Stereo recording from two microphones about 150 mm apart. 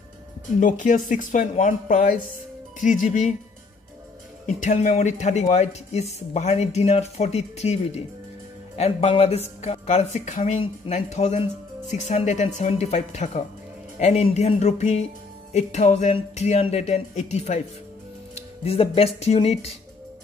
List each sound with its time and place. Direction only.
0.6 s speech: 60° left (ahead or behind)
4.5 s speech: 55° left (ahead or behind)